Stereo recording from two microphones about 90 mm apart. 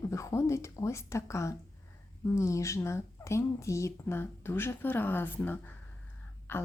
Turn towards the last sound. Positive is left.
turn(degrees=25)  # may be behind; listen again after turning